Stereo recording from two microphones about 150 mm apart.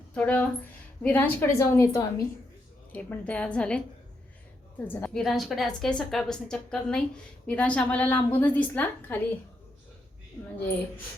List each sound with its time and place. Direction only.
0.1 s a woman's voice: 10° left (ahead or behind)
2.9 s a woman's voice: 10° left (ahead or behind)
5.2 s a woman's voice: centre (ahead or behind)